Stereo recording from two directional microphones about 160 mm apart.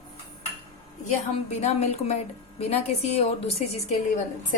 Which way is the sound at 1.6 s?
40° left (ahead or behind).